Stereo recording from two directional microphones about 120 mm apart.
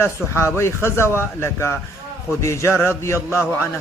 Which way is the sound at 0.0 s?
20° left (ahead or behind).